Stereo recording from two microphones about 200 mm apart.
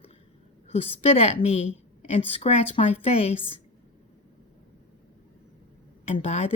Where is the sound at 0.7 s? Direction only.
30° left (ahead or behind).